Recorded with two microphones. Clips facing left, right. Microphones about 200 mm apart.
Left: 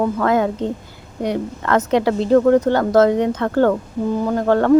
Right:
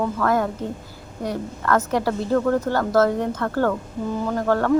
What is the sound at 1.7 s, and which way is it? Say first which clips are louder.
Speech: left 4 dB; 20° left (ahead or behind).